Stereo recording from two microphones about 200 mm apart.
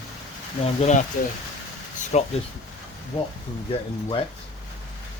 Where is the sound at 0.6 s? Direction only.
35° left (ahead or behind).